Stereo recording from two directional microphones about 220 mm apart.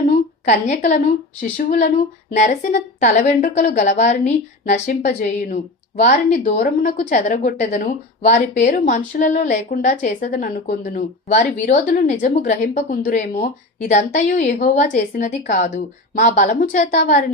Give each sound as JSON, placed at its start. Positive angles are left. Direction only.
{"t": 0.4, "sound": "a woman's voice", "side_deg": 35}